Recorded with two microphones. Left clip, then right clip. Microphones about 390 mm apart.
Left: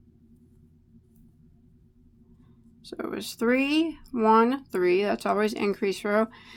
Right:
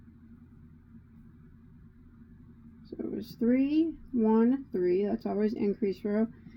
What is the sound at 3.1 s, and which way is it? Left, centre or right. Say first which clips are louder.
Speech: left 4 dB; left.